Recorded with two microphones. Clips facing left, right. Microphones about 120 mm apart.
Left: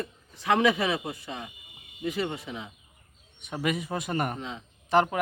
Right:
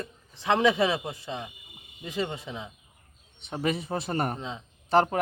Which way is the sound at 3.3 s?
30° right (ahead or behind).